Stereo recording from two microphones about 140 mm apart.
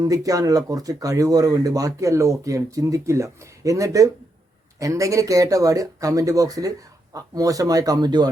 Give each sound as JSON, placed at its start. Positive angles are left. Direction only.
{"t": 0.0, "sound": "speech", "side_deg": -25}